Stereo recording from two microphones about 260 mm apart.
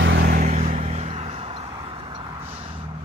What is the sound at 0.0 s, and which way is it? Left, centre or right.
Vehicle, right.